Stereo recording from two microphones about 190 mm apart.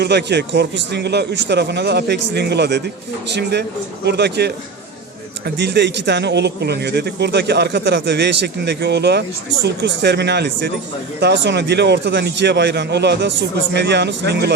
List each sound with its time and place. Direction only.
0.0 s speech: 65° right (ahead or behind)
5.5 s speech: 65° right (ahead or behind)